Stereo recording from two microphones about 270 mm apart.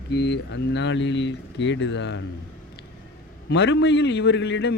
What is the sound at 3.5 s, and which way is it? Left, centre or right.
A man's voice, left.